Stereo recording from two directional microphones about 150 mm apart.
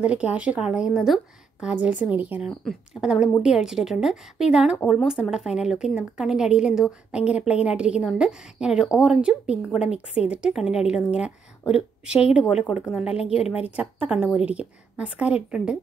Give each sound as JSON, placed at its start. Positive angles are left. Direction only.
{"t": 0.0, "sound": "a woman's voice", "side_deg": -10}
{"t": 13.1, "sound": "a woman's voice", "side_deg": 40}
{"t": 13.7, "sound": "a woman's voice", "side_deg": -10}